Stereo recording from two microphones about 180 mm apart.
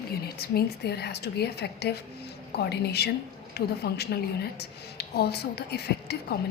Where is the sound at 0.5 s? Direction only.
65° left (ahead or behind).